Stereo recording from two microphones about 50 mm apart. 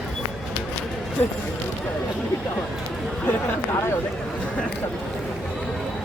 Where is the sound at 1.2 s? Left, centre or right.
Left.